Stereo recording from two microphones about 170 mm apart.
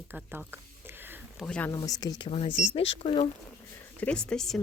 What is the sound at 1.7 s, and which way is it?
Speech, 20° left (ahead or behind).